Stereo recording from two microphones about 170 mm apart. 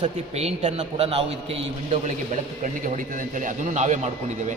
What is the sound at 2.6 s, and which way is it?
A man's voice, 50° right (ahead or behind).